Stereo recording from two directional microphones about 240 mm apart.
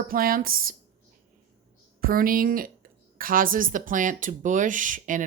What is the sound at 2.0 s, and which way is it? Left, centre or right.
Speech, right.